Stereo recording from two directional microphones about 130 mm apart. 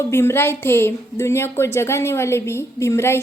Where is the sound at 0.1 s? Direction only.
20° left (ahead or behind).